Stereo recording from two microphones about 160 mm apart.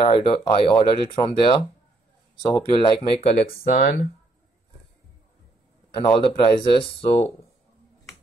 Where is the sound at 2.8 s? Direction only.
40° left (ahead or behind).